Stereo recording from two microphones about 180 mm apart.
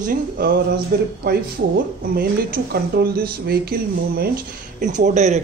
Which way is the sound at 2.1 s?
55° right (ahead or behind).